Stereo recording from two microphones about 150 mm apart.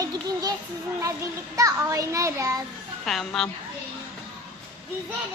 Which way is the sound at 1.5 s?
20° right (ahead or behind).